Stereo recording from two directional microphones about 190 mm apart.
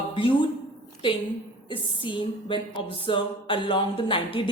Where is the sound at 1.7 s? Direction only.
25° left (ahead or behind).